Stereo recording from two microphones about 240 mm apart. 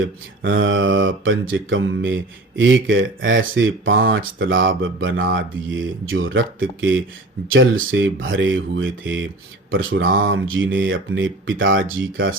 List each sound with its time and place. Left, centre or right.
0.0 s speech: right